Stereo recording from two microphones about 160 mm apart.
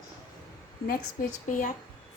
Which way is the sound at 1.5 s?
55° left (ahead or behind).